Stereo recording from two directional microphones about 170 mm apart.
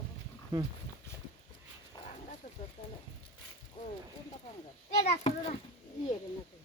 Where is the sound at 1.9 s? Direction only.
25° left (ahead or behind).